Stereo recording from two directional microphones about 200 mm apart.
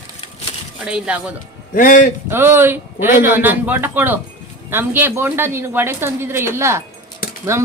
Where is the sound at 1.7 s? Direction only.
40° left (ahead or behind).